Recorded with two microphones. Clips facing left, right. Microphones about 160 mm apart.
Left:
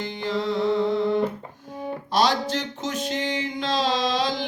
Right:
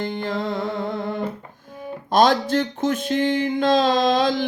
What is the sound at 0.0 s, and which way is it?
Music, 50° right (ahead or behind).